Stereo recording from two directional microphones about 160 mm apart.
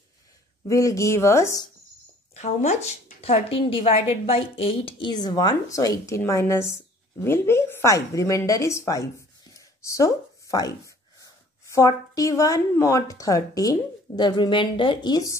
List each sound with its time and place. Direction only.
0.7 s a woman's voice: 20° left (ahead or behind)
2.3 s a woman's voice: 45° left (ahead or behind); by 9.0 s 20° left (ahead or behind)
9.5 s a sound: 20° left (ahead or behind)
11.1 s a woman's voice: 20° left (ahead or behind)